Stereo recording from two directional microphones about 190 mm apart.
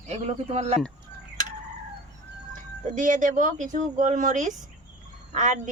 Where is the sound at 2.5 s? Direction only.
45° right (ahead or behind).